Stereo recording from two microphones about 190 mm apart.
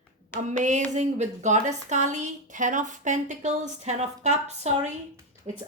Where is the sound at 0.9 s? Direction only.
40° right (ahead or behind).